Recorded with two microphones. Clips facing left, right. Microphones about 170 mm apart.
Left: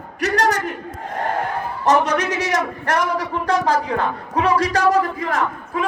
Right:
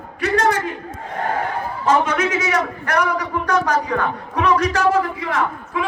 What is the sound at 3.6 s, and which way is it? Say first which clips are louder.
A man's voice: left 1 dB; 35° left (ahead or behind).